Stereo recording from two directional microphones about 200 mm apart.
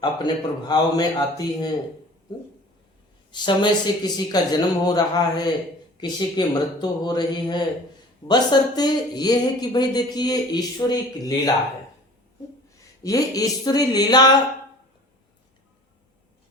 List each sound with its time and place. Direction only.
0.0 s speech: 20° left (ahead or behind)
3.3 s speech: 20° left (ahead or behind)
13.0 s speech: 15° left (ahead or behind)